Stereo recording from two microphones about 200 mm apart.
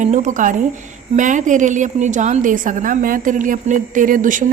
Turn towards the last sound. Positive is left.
turn(degrees=-40)  # may be behind; listen again after turning